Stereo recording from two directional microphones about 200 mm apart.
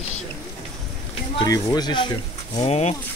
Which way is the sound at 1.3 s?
20° left (ahead or behind).